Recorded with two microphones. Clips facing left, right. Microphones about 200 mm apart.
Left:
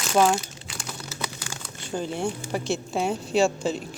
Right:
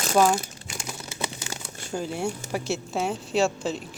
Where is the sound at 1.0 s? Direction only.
25° right (ahead or behind).